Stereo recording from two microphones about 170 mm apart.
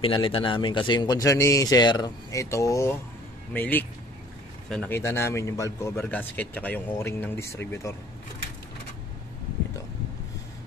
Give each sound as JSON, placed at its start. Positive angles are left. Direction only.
{"t": 0.0, "sound": "a man's voice", "side_deg": 30}